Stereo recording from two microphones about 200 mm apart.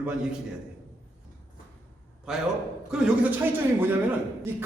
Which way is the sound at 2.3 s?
5° right (ahead or behind).